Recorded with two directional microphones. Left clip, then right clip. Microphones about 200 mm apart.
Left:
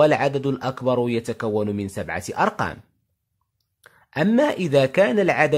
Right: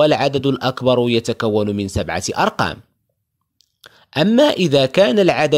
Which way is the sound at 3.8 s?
30° right (ahead or behind).